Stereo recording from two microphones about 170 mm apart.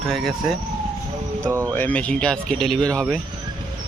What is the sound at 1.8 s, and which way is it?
Speech, 10° left (ahead or behind).